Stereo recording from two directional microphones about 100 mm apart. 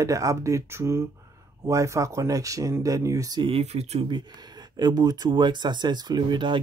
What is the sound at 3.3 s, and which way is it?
Speech, 65° right (ahead or behind).